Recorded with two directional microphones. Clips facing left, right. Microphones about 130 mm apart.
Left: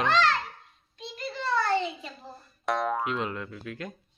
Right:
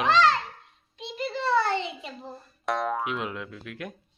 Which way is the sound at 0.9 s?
25° right (ahead or behind).